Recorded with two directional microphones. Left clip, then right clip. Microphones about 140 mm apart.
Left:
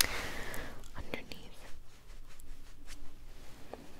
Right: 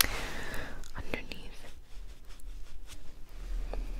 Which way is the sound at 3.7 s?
30° right (ahead or behind).